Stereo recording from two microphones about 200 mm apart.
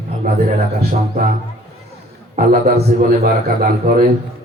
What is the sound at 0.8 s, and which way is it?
Speech, 50° right (ahead or behind).